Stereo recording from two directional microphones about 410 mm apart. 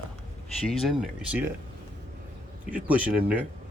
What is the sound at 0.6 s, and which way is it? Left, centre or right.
Speech, centre.